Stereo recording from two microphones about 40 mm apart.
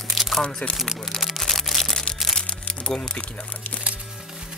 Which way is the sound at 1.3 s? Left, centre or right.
Centre.